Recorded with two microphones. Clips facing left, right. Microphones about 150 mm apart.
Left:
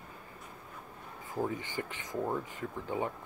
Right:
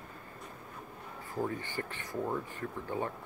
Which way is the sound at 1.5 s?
15° left (ahead or behind).